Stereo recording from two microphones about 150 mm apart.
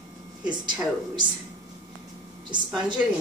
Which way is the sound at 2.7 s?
5° right (ahead or behind).